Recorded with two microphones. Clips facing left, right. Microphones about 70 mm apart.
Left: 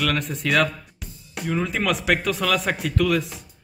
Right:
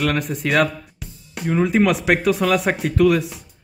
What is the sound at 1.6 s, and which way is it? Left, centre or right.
Speech, centre.